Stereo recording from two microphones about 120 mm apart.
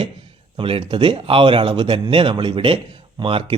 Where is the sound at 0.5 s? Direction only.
45° right (ahead or behind).